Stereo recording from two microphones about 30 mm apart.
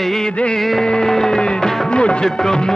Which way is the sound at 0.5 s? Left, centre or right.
Centre.